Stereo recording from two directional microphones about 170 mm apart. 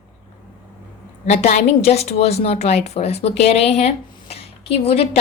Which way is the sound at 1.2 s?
40° left (ahead or behind).